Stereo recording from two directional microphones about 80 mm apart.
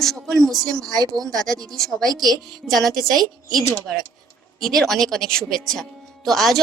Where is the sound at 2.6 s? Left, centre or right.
Centre.